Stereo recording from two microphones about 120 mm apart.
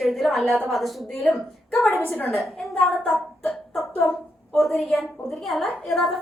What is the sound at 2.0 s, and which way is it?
Speech, 15° left (ahead or behind).